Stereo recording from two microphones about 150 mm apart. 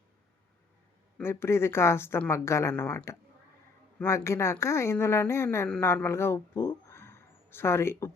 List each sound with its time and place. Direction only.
1.2 s a woman's voice: 15° left (ahead or behind)